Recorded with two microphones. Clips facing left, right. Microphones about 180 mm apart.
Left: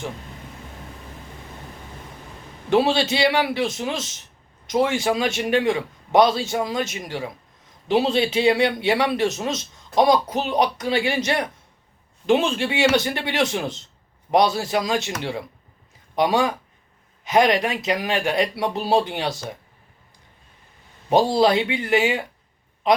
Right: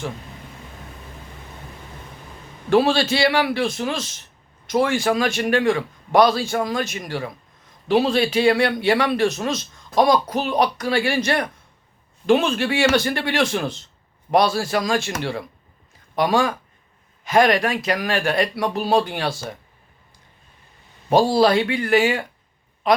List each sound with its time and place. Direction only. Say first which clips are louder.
2.6 s speech: right 2 dB; 20° left (ahead or behind)
21.1 s speech: right 1 dB; 20° left (ahead or behind)